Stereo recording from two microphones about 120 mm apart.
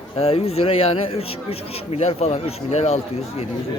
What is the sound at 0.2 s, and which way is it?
Speech, 55° left (ahead or behind).